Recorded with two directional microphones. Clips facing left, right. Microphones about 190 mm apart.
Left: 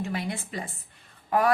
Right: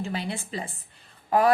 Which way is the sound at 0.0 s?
30° right (ahead or behind).